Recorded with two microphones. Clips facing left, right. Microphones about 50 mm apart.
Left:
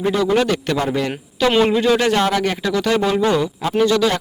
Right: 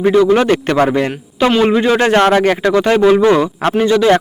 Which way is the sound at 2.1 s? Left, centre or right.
Right.